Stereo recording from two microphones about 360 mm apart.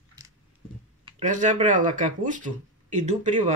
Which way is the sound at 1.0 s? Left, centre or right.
Centre.